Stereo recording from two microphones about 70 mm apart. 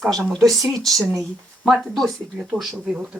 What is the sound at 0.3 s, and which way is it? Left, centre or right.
Speech, centre.